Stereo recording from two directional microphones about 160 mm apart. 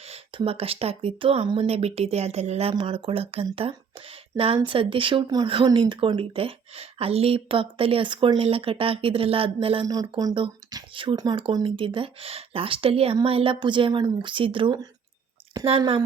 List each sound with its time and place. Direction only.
0.0 s a woman's voice: 35° right (ahead or behind)
9.8 s a woman's voice: 25° right (ahead or behind)